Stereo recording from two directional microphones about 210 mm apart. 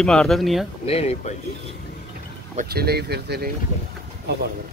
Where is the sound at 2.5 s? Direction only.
50° right (ahead or behind).